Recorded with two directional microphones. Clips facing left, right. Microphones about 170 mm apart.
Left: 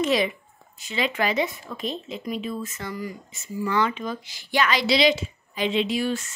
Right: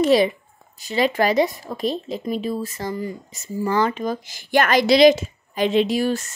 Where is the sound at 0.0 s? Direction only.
35° right (ahead or behind).